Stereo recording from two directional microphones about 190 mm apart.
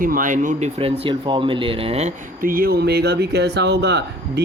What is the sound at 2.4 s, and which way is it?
Mantra, 50° right (ahead or behind).